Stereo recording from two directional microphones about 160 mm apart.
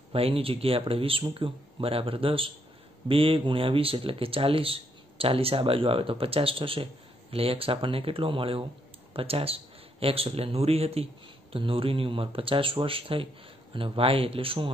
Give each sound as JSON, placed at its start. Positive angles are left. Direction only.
{"t": 0.1, "sound": "speech", "side_deg": -35}